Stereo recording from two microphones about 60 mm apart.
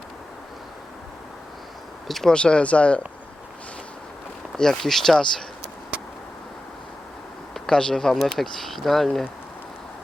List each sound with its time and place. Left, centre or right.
2.0 s speech: centre
2.3 s speech: centre
4.5 s speech: centre
7.5 s speech: centre